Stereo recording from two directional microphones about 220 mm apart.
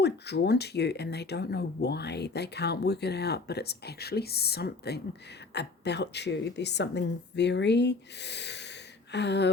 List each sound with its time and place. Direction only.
0.0 s speech: 50° left (ahead or behind)